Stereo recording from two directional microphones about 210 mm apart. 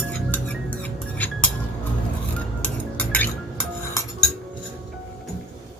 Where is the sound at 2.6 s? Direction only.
5° left (ahead or behind).